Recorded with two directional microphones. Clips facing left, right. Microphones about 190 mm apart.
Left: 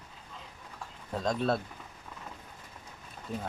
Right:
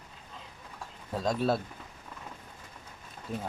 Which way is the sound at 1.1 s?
5° right (ahead or behind).